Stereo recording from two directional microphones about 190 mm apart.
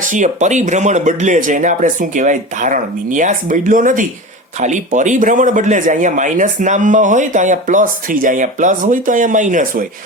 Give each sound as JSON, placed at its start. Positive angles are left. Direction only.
{"t": 0.0, "sound": "speech", "side_deg": -40}